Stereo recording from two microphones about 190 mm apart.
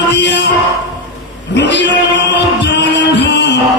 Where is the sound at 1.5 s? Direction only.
65° left (ahead or behind).